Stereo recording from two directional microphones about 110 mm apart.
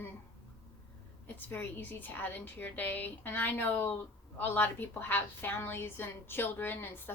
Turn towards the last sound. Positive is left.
turn(degrees=20)  # may be behind; listen again after turning